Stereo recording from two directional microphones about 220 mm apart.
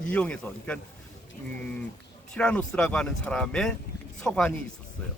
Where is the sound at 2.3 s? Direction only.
5° left (ahead or behind).